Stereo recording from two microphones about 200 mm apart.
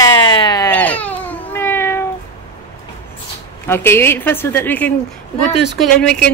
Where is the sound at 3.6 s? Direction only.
10° left (ahead or behind).